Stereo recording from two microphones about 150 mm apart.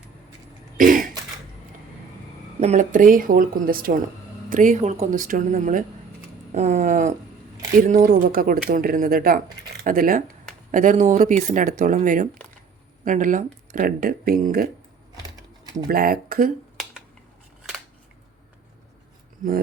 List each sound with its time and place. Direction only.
0.8 s speech: 65° right (ahead or behind)
2.6 s speech: 50° right (ahead or behind); by 3.9 s 75° right (ahead or behind)
4.4 s speech: 60° right (ahead or behind)
10.7 s speech: 60° right (ahead or behind); by 14.7 s 80° right
15.9 s speech: 80° right